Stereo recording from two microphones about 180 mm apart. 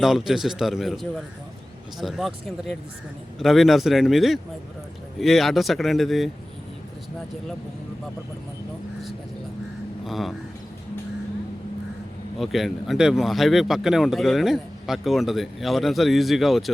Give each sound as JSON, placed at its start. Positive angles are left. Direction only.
{"t": 0.0, "sound": "speech", "side_deg": 0}
{"t": 10.1, "sound": "speech", "side_deg": 0}
{"t": 12.4, "sound": "speech", "side_deg": 0}